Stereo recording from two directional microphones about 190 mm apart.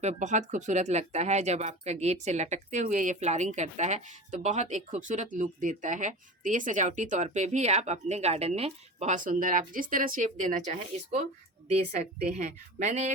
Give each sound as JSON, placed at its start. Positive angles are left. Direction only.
{"t": 0.0, "sound": "a woman's voice", "side_deg": -40}
{"t": 12.4, "sound": "a woman's voice", "side_deg": -40}